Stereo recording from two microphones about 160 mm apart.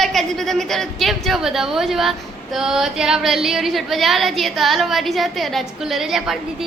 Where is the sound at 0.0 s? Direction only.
Centre (ahead or behind).